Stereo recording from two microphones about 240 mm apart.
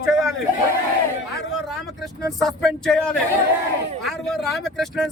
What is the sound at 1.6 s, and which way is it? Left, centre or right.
Vehicle, centre.